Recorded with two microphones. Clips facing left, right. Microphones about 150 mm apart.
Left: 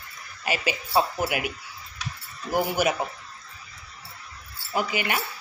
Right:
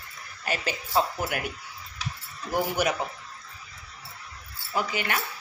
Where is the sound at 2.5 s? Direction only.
5° left (ahead or behind).